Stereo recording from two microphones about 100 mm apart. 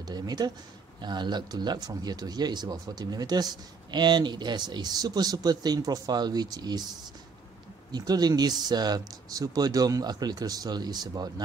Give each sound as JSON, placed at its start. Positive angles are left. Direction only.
{"t": 0.0, "sound": "speech", "side_deg": -45}
{"t": 7.9, "sound": "speech", "side_deg": -40}